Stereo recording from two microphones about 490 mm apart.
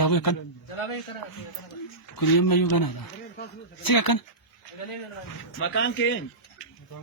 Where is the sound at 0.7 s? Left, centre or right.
Left.